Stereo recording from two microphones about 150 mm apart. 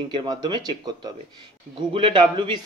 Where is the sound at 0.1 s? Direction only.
30° right (ahead or behind).